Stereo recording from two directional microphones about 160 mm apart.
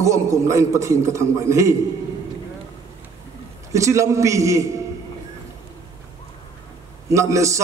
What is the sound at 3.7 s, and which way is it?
Speech, 20° right (ahead or behind).